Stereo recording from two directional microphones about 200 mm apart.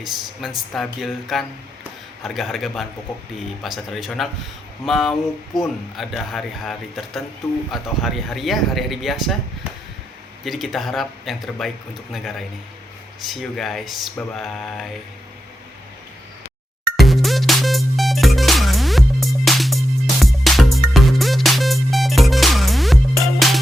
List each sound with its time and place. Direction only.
0.0 s speech: centre (ahead or behind)
10.4 s speech: centre (ahead or behind)
17.0 s music: centre (ahead or behind)